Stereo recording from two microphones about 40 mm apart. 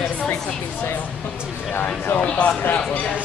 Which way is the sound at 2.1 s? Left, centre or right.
Left.